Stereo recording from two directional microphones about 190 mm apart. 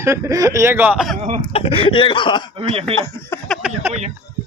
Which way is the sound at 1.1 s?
40° right (ahead or behind).